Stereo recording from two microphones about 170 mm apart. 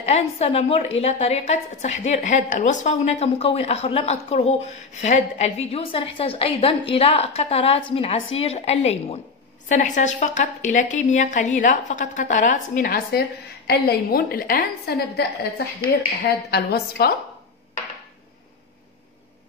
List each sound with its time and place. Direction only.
0.0 s a woman's voice: 40° left (ahead or behind); by 17.1 s 70° left (ahead or behind)